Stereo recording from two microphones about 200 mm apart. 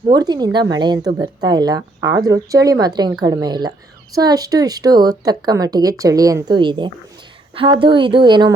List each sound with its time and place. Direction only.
0.1 s a woman's voice: 20° right (ahead or behind)